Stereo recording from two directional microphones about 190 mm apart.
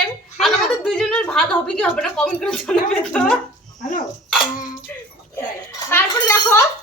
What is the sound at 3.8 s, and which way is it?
Dog, 40° left (ahead or behind).